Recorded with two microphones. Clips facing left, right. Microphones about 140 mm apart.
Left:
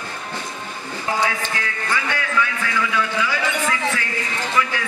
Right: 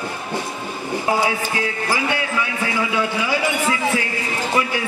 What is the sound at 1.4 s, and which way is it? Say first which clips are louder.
A man's voice: right 4 dB; 20° right (ahead or behind).